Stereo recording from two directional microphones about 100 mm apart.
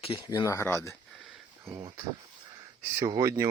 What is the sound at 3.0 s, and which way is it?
Speech, 35° right (ahead or behind).